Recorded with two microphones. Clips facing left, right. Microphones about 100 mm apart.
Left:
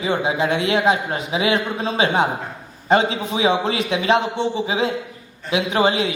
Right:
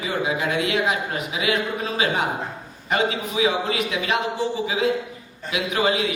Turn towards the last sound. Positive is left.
turn(degrees=30)  # may be behind; listen again after turning